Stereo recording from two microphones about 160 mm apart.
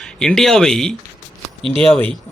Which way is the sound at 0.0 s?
5° left (ahead or behind).